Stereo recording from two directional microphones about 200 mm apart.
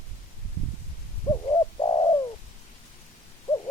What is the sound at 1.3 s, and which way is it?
Bird, 20° left (ahead or behind).